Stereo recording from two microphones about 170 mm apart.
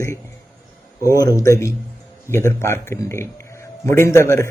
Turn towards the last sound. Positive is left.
turn(degrees=15)  # may be behind; listen again after turning